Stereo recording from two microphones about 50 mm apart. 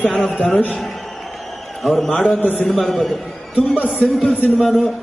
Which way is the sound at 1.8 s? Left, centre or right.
Centre.